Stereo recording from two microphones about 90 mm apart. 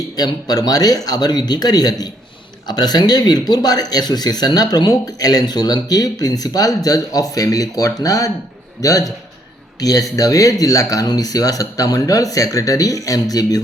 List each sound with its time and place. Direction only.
0.2 s speech: 45° left (ahead or behind)